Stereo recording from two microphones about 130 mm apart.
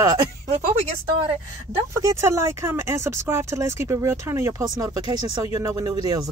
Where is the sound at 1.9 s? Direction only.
25° right (ahead or behind).